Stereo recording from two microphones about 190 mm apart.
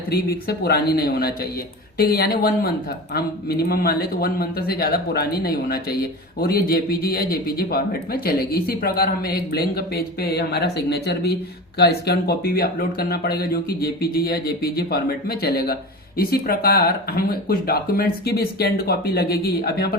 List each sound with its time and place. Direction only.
0.1 s speech: 55° left (ahead or behind)